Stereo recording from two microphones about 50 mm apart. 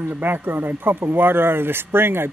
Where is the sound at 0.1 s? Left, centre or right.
Right.